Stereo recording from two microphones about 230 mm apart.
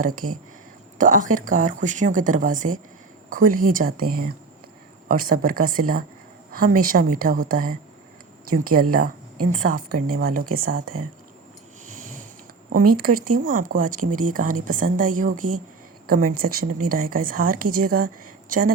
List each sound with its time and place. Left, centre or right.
0.0 s speech: right
10.8 s speech: right
11.9 s sniff: right
12.7 s speech: right
16.6 s speech: right
16.9 s speech: right